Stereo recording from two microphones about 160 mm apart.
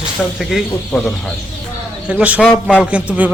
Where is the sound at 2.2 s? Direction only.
10° right (ahead or behind).